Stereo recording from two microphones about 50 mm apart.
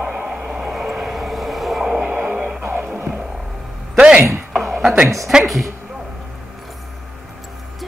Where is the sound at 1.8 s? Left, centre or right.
Centre.